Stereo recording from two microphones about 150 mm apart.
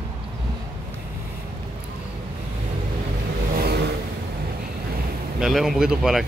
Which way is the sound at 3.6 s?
90° right.